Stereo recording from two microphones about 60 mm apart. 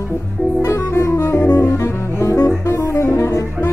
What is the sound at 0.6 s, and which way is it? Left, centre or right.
Saxophone, left.